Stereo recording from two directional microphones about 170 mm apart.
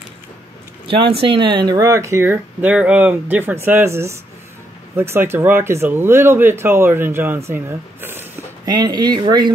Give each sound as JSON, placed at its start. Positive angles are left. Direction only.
{"t": 0.8, "sound": "speech", "side_deg": -30}
{"t": 8.6, "sound": "speech", "side_deg": -25}